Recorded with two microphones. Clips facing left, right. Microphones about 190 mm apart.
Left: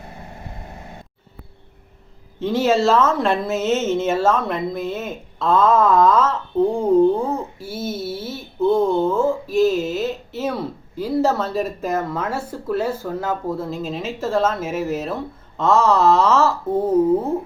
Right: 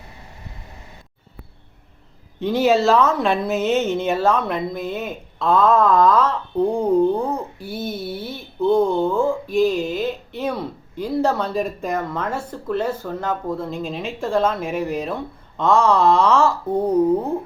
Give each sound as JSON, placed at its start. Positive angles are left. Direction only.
{"t": 2.4, "sound": "speech", "side_deg": 0}